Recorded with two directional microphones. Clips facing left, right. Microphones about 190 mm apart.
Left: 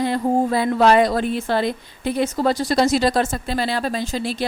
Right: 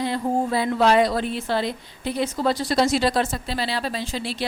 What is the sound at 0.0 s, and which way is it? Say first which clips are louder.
A woman's voice: left 4 dB; 50° left (ahead or behind).